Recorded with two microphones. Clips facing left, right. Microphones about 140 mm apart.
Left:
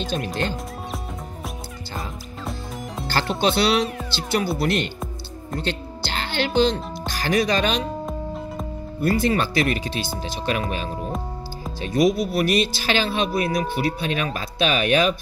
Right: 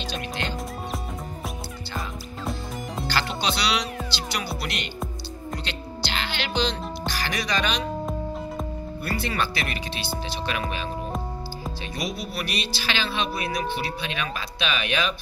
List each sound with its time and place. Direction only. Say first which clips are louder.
3.1 s speech: left 6 dB; 50° left (ahead or behind)
9.0 s speech: left 8 dB; 40° left (ahead or behind)
11.1 s music: left 2 dB; centre (ahead or behind)
11.8 s speech: left 14 dB; 45° left (ahead or behind)